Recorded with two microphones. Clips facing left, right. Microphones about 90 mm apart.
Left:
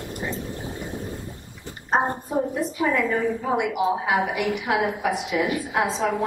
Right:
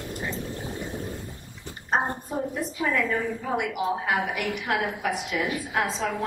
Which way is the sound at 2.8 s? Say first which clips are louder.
Left 3 dB; 10° left (ahead or behind).